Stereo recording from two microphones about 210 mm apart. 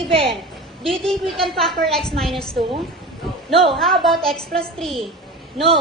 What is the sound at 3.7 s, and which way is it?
A woman's voice, centre (ahead or behind).